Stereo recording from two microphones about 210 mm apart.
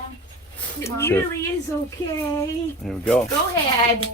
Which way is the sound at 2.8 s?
5° left (ahead or behind).